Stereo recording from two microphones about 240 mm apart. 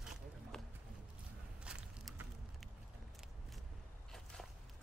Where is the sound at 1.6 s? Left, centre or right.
Centre.